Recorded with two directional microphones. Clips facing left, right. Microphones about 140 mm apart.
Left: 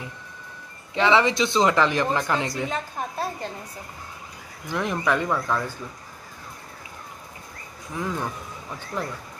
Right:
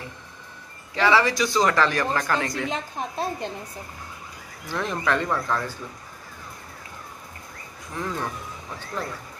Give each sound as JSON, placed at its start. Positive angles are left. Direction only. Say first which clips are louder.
{"t": 0.9, "sound": "speech", "louder": "left 1 dB", "side_deg": 20}
{"t": 2.7, "sound": "a woman's voice", "louder": "even", "side_deg": -20}
{"t": 4.6, "sound": "speech", "louder": "left 1 dB", "side_deg": 15}
{"t": 7.9, "sound": "speech", "louder": "left 1 dB", "side_deg": 10}